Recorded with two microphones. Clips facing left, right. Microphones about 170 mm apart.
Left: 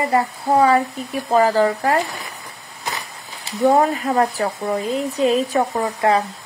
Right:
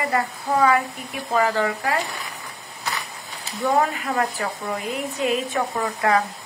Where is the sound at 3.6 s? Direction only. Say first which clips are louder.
Left 6 dB; 40° left (ahead or behind).